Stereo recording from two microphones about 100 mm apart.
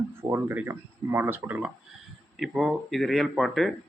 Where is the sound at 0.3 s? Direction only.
25° right (ahead or behind).